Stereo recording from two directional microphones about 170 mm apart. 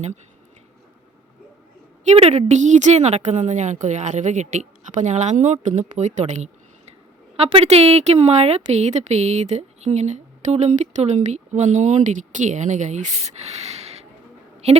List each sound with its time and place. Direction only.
2.0 s a woman's voice: 40° right (ahead or behind)
13.4 s a sound: 40° right (ahead or behind)
14.6 s speech: 40° right (ahead or behind)